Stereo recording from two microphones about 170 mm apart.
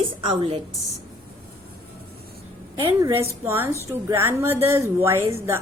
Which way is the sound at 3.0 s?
15° right (ahead or behind).